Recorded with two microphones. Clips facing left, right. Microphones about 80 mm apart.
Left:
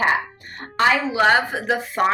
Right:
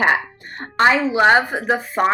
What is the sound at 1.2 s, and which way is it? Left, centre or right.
Speech, right.